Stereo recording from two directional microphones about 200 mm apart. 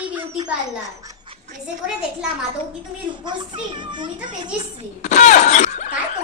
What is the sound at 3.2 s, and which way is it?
Speech, 25° right (ahead or behind).